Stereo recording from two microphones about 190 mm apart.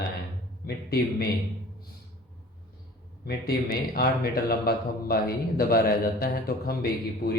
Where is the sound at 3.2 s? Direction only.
55° left (ahead or behind).